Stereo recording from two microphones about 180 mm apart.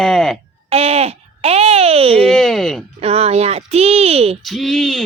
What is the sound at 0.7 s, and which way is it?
Speech, 35° right (ahead or behind).